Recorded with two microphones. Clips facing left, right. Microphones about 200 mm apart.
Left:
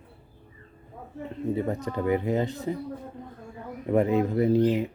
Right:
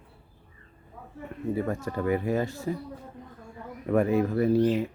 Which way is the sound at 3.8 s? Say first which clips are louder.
Left 1 dB; 20° left (ahead or behind).